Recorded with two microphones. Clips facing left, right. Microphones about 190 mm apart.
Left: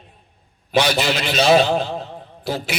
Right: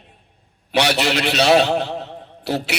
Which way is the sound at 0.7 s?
70° right (ahead or behind).